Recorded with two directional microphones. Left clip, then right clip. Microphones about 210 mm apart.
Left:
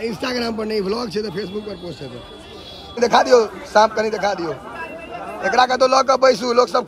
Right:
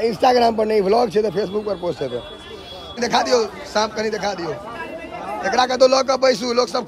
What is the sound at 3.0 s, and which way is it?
Speech, 5° right (ahead or behind).